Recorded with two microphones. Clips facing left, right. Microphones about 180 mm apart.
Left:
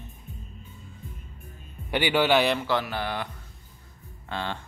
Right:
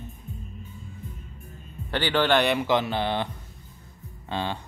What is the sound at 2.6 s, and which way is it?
Mantra, 20° right (ahead or behind).